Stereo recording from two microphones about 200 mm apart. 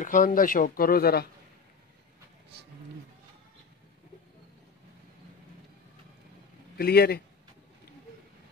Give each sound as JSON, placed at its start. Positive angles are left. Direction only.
{"t": 0.0, "sound": "speech", "side_deg": 40}
{"t": 6.8, "sound": "speech", "side_deg": 50}